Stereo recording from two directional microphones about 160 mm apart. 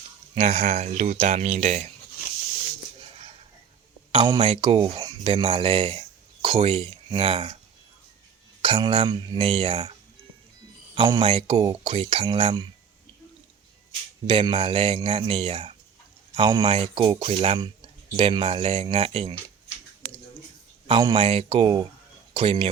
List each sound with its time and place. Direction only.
0.3 s speech: 45° right (ahead or behind)
4.1 s speech: 30° right (ahead or behind)
8.6 s speech: 35° right (ahead or behind)
10.9 s speech: 25° right (ahead or behind)
11.3 s speech: 40° right (ahead or behind)
11.5 s speech: 25° right (ahead or behind)
14.3 s speech: 35° right (ahead or behind)
20.8 s speech: 30° right (ahead or behind)